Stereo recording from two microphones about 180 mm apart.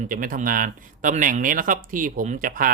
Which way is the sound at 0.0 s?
50° right (ahead or behind).